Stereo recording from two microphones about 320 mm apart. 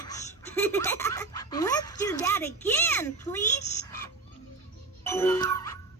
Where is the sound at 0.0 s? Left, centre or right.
Centre.